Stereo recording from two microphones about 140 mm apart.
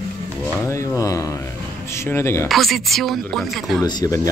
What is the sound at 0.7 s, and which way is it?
Speech, 20° left (ahead or behind).